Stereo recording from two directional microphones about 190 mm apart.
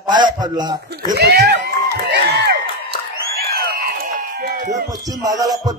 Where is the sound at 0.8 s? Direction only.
55° right (ahead or behind).